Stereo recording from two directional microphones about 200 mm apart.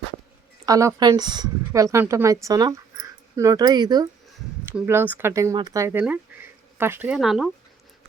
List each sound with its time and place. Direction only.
0.6 s a woman's voice: 15° right (ahead or behind)